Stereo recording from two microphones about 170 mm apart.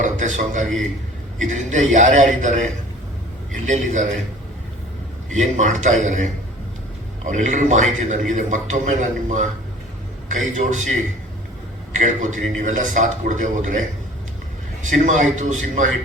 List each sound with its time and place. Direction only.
0.0 s a man's voice: 45° right (ahead or behind)
5.3 s a man's voice: 45° right (ahead or behind)
7.3 s a man's voice: 45° right (ahead or behind)
10.6 s a man's voice: 50° right (ahead or behind)
12.0 s a man's voice: 50° right (ahead or behind)